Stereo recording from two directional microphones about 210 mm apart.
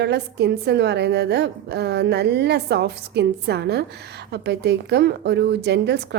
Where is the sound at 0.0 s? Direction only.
50° right (ahead or behind).